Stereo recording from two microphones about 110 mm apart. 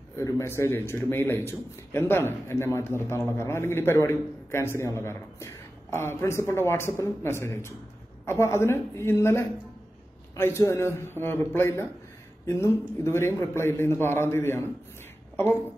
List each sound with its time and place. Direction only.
0.1 s a man's voice: 25° left (ahead or behind)